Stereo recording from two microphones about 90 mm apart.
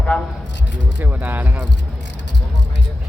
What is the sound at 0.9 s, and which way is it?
Speech, 20° right (ahead or behind).